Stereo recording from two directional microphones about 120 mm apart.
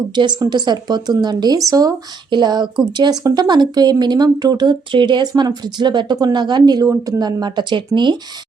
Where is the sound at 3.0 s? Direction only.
35° right (ahead or behind).